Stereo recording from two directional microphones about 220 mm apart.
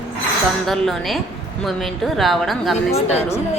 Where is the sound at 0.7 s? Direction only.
Centre (ahead or behind).